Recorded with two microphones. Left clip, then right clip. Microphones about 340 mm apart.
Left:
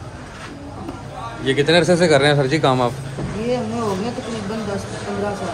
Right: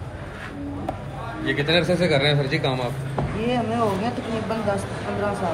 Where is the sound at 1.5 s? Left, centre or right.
Left.